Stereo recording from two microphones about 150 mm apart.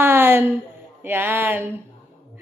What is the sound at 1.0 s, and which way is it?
Speech, 15° right (ahead or behind).